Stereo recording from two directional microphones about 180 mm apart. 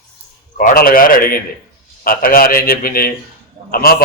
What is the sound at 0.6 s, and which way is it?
A man's voice, 50° left (ahead or behind).